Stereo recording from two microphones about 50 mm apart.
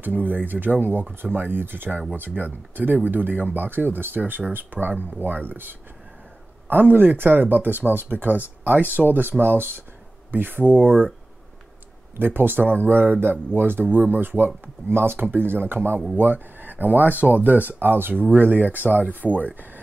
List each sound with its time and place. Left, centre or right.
0.0 s speech: right
12.2 s speech: right